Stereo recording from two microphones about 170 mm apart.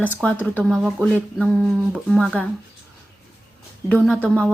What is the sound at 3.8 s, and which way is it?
Speech, 10° left (ahead or behind).